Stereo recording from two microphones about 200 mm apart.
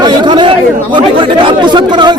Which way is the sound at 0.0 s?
20° right (ahead or behind).